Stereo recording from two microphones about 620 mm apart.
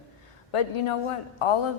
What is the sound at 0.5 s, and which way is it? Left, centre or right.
Speech, left.